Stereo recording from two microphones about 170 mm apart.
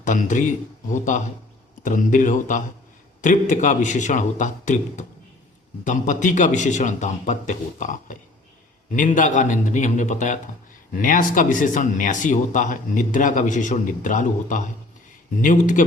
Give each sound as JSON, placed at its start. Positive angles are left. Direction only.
{"t": 0.0, "sound": "speech", "side_deg": 50}